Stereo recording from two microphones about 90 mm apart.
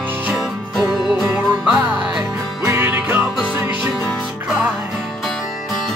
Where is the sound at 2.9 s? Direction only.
20° right (ahead or behind).